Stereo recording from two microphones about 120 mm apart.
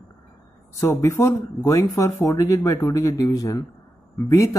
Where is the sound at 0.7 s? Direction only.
30° left (ahead or behind).